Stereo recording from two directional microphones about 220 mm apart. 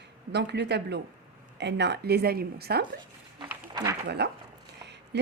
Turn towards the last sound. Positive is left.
turn(degrees=-50)  # may be behind; listen again after turning